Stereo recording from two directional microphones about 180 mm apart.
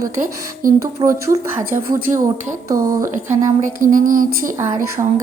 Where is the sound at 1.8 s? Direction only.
50° right (ahead or behind).